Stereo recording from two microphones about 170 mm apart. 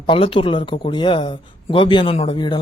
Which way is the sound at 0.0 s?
30° left (ahead or behind).